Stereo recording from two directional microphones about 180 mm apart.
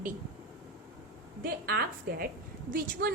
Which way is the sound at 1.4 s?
60° right (ahead or behind).